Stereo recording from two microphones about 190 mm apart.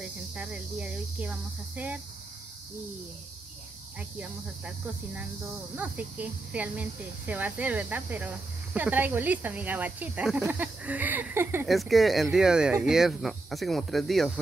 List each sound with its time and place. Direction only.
0.0 s speech: 5° right (ahead or behind)
4.2 s speech: 5° right (ahead or behind)
11.6 s speech: centre (ahead or behind)